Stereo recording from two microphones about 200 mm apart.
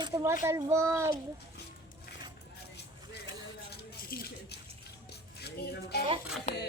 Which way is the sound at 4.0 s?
50° left (ahead or behind).